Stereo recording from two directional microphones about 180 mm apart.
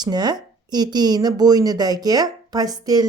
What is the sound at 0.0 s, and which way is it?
Speech, 25° right (ahead or behind).